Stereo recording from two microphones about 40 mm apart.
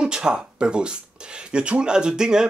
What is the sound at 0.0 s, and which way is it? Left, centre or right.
Speech, right.